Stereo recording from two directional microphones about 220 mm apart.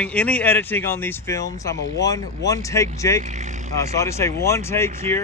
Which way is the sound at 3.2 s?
30° right (ahead or behind).